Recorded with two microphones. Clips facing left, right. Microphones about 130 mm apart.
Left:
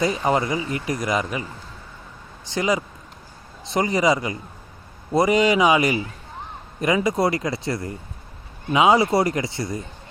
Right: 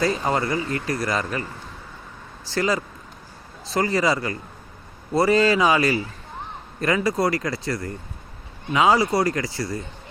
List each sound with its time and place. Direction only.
0.0 s speech: 20° left (ahead or behind)
2.5 s speech: 15° left (ahead or behind)